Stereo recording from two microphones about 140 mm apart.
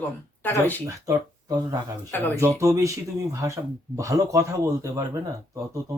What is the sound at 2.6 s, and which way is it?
Speech, 20° right (ahead or behind).